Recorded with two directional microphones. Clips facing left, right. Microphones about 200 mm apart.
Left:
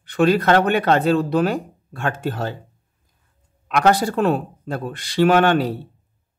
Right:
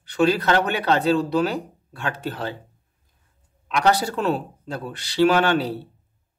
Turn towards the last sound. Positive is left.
turn(degrees=50)  # may be behind; listen again after turning